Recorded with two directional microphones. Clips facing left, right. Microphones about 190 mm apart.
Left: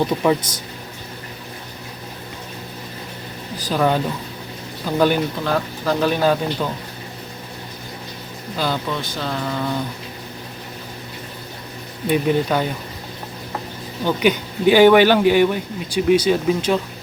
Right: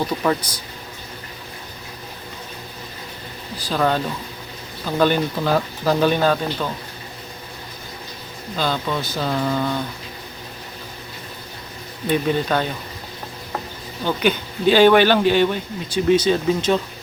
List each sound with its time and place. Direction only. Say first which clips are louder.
3.7 s speech: left 2 dB; 10° left (ahead or behind)
5.4 s speech: right 2 dB; 5° right (ahead or behind); by 6.7 s 10° left (ahead or behind)
8.5 s speech: even; 10° left (ahead or behind)
9.0 s speech: right 3 dB; 5° right (ahead or behind)
12.0 s speech: left 2 dB; 10° left (ahead or behind)
14.0 s speech: left 2 dB; 15° left (ahead or behind)